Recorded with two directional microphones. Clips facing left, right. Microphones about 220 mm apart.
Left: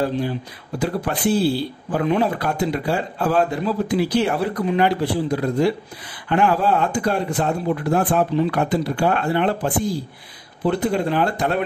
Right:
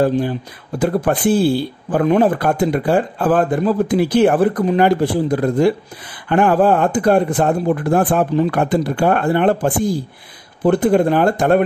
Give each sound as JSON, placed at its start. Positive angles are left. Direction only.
{"t": 0.0, "sound": "speech", "side_deg": -50}